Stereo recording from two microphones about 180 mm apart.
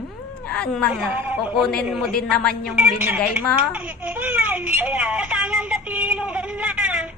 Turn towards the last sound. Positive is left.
turn(degrees=-5)  # may be behind; listen again after turning